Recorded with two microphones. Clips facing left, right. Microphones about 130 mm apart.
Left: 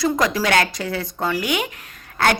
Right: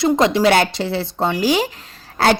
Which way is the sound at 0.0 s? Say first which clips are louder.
Right 5 dB; 25° right (ahead or behind).